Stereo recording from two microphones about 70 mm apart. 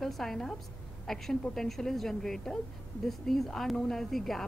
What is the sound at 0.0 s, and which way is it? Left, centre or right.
A woman's voice, centre.